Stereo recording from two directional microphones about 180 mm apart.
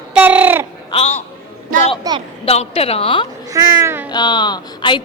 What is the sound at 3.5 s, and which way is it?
Speech, 15° right (ahead or behind).